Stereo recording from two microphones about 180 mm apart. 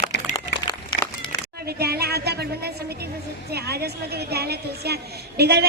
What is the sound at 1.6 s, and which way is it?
A woman's voice, 60° right (ahead or behind).